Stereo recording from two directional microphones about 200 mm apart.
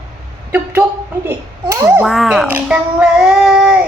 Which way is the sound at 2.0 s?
Centre (ahead or behind).